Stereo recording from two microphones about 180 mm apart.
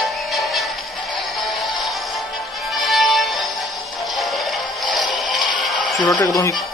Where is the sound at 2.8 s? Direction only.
Centre (ahead or behind).